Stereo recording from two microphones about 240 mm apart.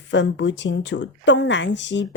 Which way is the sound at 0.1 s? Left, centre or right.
Left.